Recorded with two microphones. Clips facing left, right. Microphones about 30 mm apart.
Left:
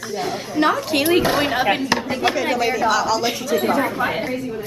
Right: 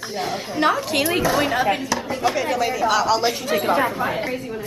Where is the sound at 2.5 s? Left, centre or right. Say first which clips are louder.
Left 2 dB; centre.